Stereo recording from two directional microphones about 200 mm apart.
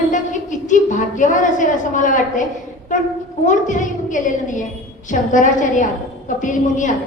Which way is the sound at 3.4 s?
40° left (ahead or behind).